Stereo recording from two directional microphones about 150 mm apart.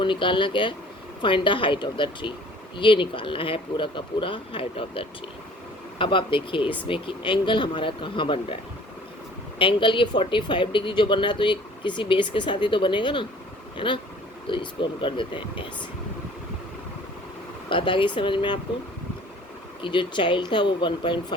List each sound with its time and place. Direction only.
0.0 s speech: 35° left (ahead or behind)
9.6 s speech: 35° left (ahead or behind)
17.7 s speech: 35° left (ahead or behind)
19.8 s speech: 30° left (ahead or behind)